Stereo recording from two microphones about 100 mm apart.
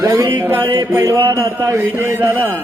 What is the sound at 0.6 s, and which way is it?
Mantra, 40° right (ahead or behind).